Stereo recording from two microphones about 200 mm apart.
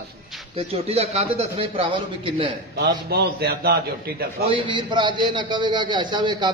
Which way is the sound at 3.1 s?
55° right (ahead or behind).